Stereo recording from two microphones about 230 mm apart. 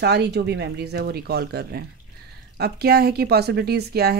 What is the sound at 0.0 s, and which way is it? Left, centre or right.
Speech, right.